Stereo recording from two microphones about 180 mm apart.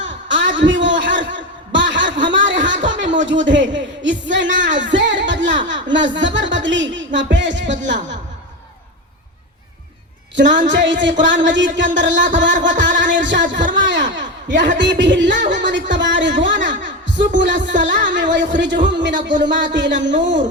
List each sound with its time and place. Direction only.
0.0 s a sound: 90° right
3.4 s speech: 85° right
10.3 s a woman's voice: 85° right